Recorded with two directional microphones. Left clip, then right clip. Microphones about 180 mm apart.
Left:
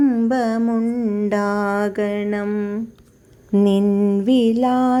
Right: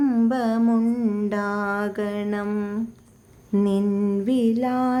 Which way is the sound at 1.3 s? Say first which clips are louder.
Left 7 dB; 25° left (ahead or behind).